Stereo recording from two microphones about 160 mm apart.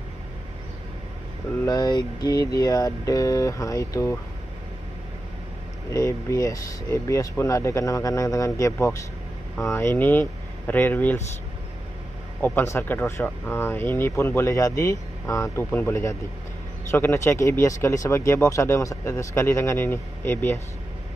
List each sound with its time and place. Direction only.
1.7 s speech: 25° left (ahead or behind)
5.9 s speech: 20° left (ahead or behind)
12.4 s speech: 10° left (ahead or behind)